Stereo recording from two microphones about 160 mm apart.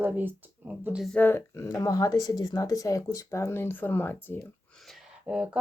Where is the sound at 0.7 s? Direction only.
5° right (ahead or behind).